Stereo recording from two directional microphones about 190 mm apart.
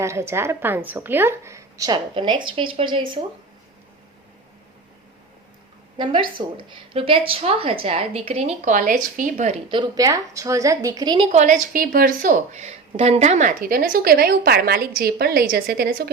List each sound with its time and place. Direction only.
0.0 s a woman's voice: 15° right (ahead or behind)
6.0 s a woman's voice: 25° right (ahead or behind); by 9.6 s 40° right (ahead or behind)
9.6 s a woman's voice: 25° right (ahead or behind)
11.3 s a woman's voice: 40° right (ahead or behind)